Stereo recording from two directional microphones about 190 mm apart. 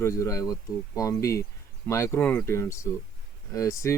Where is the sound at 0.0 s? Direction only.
15° left (ahead or behind).